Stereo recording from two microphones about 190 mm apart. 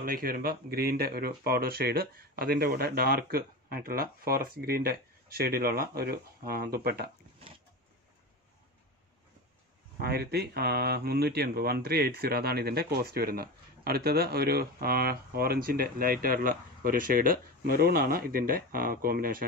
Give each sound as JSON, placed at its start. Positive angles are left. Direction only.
{"t": 0.0, "sound": "speech", "side_deg": -50}
{"t": 9.9, "sound": "speech", "side_deg": -55}